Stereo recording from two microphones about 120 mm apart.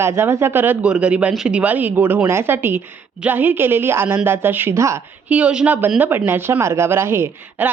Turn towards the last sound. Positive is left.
turn(degrees=-20)  # may be behind; listen again after turning